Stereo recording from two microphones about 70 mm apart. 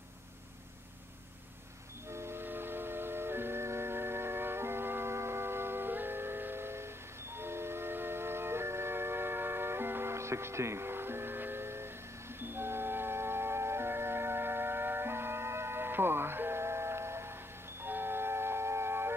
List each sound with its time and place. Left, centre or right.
2.0 s music: right